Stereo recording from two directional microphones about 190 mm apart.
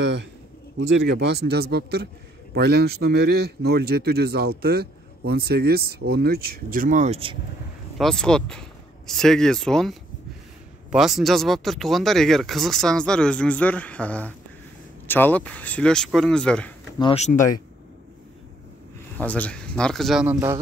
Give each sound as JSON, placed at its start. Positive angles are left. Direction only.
{"t": 0.7, "sound": "a man's voice", "side_deg": -65}
{"t": 8.0, "sound": "speech", "side_deg": 5}
{"t": 17.0, "sound": "speech", "side_deg": 35}
{"t": 19.1, "sound": "speech", "side_deg": 10}